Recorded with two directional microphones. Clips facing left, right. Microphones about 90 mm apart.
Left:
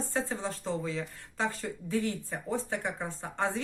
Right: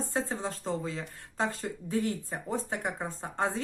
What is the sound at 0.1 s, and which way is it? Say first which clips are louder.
A woman's voice: even; 30° right (ahead or behind).